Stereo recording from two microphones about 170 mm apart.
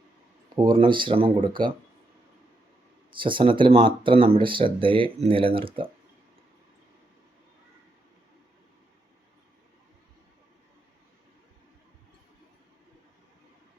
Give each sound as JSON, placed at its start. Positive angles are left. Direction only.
{"t": 0.5, "sound": "speech", "side_deg": -30}
{"t": 3.2, "sound": "speech", "side_deg": -30}